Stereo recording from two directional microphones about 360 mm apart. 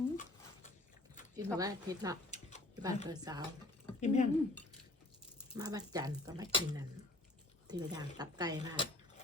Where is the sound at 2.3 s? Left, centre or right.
Centre.